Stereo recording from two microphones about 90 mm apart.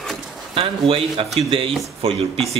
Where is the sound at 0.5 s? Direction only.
90° right.